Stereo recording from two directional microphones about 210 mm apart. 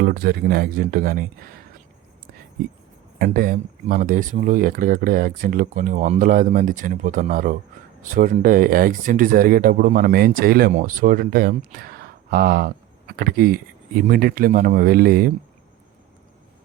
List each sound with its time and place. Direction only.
0.0 s speech: 50° right (ahead or behind)
3.2 s speech: 45° right (ahead or behind)